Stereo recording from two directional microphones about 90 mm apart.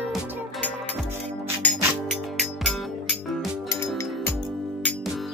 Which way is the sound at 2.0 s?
Centre (ahead or behind).